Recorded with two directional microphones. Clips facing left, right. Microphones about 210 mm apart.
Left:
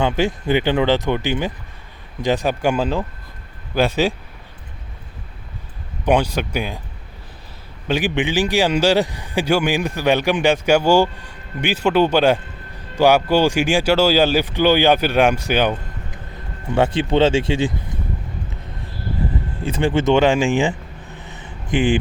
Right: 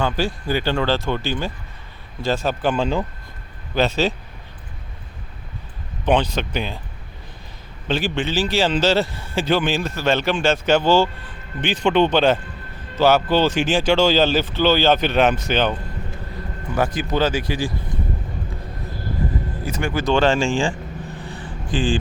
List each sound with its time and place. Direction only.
0.0 s a man's voice: 20° left (ahead or behind)
6.1 s a man's voice: 10° left (ahead or behind)
7.9 s a man's voice: 15° left (ahead or behind)
16.7 s speech: 30° left (ahead or behind)
19.6 s speech: 30° left (ahead or behind)
21.2 s a sound: 20° left (ahead or behind)